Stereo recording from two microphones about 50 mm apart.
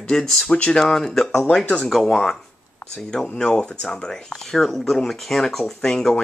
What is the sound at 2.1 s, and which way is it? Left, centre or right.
Speech, centre.